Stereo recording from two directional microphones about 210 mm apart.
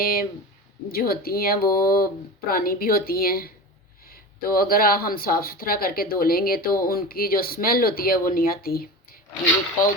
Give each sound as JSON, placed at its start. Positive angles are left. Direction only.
{"t": 0.0, "sound": "speech", "side_deg": 45}